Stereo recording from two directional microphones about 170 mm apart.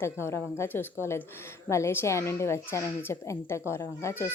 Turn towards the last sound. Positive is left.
turn(degrees=15)  # may be behind; listen again after turning